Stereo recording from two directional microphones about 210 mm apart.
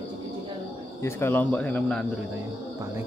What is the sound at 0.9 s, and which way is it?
Speech, 10° left (ahead or behind).